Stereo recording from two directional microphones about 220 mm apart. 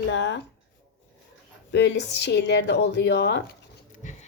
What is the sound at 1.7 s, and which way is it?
A woman's voice, 50° left (ahead or behind).